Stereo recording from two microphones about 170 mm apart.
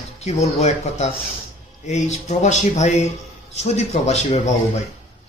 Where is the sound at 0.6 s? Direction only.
40° left (ahead or behind).